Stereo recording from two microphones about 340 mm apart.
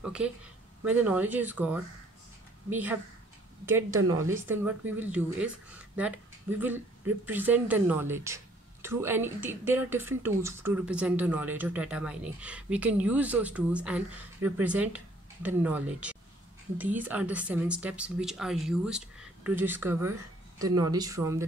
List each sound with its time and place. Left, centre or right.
0.0 s speech: centre
4.1 s speech: centre